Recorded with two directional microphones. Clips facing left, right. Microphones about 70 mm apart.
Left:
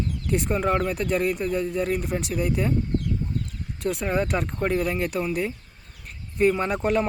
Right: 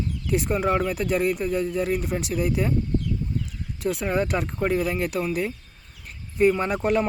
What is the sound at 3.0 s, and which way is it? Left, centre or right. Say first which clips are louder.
Chicken: even; left.